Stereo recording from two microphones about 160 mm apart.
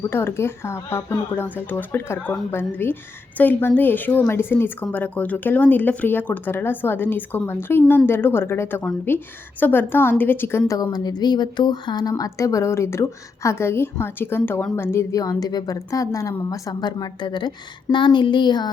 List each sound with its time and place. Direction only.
0.1 s a woman's voice: 15° left (ahead or behind)